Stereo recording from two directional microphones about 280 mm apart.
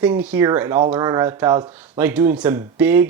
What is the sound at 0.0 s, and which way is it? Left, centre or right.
Speech, centre.